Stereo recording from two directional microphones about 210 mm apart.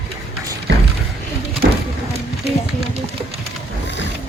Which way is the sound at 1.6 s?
50° right (ahead or behind).